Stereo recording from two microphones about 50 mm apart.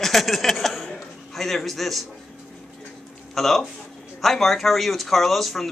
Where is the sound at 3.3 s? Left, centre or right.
Centre.